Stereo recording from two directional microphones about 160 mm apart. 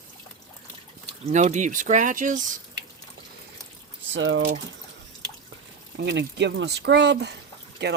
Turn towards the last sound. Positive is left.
turn(degrees=-90)